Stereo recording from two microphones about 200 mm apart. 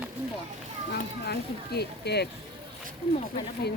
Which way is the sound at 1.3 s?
55° left (ahead or behind).